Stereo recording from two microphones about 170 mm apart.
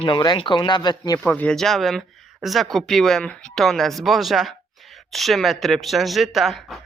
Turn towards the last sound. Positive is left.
turn(degrees=0)  # may be behind; listen again after turning